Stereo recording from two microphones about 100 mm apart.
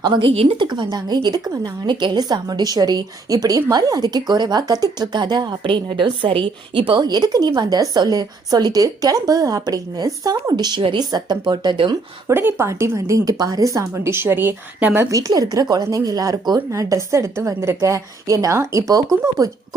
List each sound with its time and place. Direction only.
0.0 s a woman's voice: 50° right (ahead or behind)
12.3 s speech: 20° right (ahead or behind)
14.9 s speech: 35° right (ahead or behind)